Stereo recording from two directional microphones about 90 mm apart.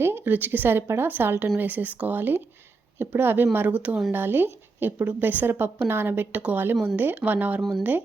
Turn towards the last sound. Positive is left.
turn(degrees=0)  # may be behind; listen again after turning